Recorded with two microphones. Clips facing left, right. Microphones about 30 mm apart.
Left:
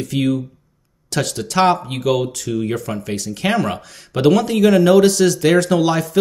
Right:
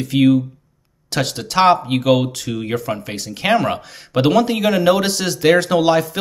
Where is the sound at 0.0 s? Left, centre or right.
Centre.